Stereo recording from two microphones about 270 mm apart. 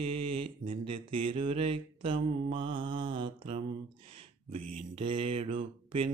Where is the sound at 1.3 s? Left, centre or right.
Centre.